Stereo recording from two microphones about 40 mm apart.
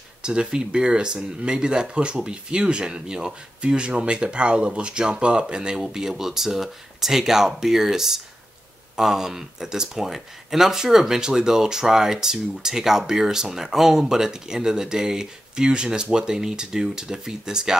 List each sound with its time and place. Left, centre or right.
0.2 s speech: right